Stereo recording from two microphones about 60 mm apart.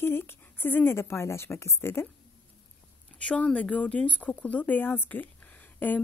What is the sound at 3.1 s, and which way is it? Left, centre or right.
Speech, centre.